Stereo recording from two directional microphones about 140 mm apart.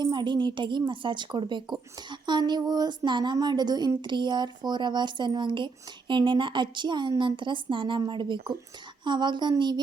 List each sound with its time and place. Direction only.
0.0 s a woman's voice: 30° right (ahead or behind)